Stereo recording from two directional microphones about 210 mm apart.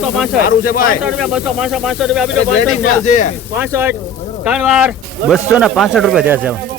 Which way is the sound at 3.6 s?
10° right (ahead or behind).